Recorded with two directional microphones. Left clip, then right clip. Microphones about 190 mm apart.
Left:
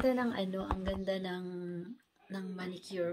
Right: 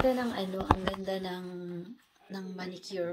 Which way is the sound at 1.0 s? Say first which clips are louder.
Right 1 dB; 10° left (ahead or behind).